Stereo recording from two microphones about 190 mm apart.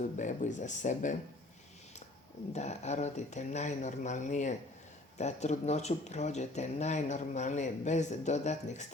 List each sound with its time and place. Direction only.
0.2 s speech: 40° left (ahead or behind)
2.5 s speech: 35° left (ahead or behind)